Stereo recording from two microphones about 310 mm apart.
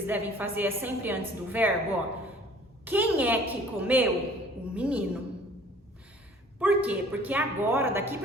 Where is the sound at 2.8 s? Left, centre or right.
Centre.